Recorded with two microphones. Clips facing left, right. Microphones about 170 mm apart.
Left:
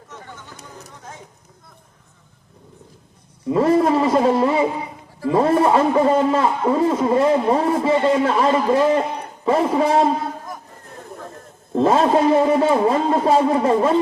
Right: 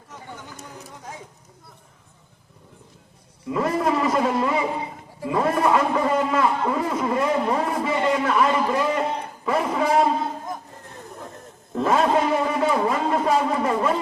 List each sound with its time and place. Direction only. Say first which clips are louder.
3.5 s a man's voice: left 6 dB; 30° left (ahead or behind)
11.7 s a man's voice: left 4 dB; 30° left (ahead or behind)